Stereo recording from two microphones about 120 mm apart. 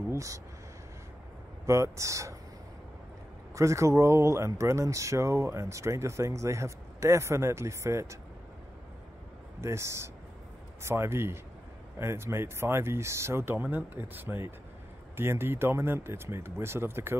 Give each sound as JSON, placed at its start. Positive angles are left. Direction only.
{"t": 0.1, "sound": "a sound", "side_deg": -25}
{"t": 1.7, "sound": "speech", "side_deg": -25}
{"t": 3.5, "sound": "speech", "side_deg": -25}
{"t": 9.6, "sound": "speech", "side_deg": -25}